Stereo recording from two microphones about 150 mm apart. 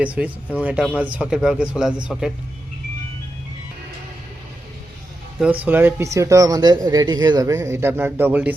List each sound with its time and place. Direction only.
0.0 s speech: 10° right (ahead or behind)
5.4 s speech: 10° right (ahead or behind)